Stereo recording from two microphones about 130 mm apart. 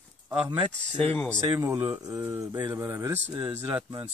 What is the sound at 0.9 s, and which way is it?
Speech, 15° left (ahead or behind).